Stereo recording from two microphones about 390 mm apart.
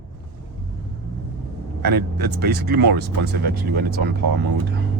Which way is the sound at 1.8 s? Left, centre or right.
Right.